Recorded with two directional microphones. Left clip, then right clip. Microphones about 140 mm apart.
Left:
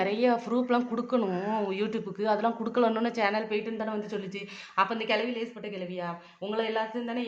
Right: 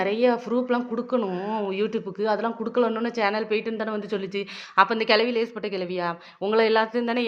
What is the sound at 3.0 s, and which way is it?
A woman's voice, 15° right (ahead or behind).